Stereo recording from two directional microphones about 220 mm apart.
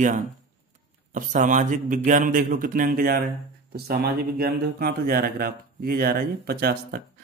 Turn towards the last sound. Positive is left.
turn(degrees=-40)  # may be behind; listen again after turning